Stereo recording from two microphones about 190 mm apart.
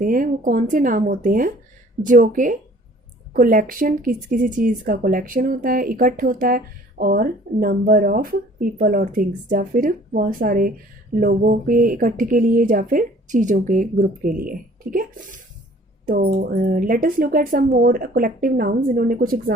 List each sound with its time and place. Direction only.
0.0 s speech: 45° right (ahead or behind)